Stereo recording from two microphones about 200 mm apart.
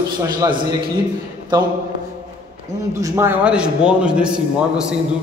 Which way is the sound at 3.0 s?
15° right (ahead or behind).